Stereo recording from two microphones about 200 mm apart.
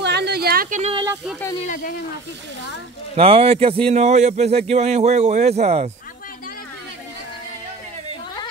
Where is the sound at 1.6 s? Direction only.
45° left (ahead or behind).